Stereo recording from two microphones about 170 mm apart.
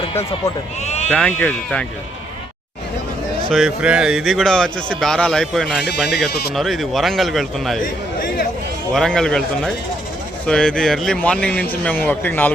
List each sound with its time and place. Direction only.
0.9 s sheep: 40° left (ahead or behind)
1.1 s speech: 5° left (ahead or behind)
3.5 s speech: 5° right (ahead or behind)
8.9 s speech: 5° left (ahead or behind)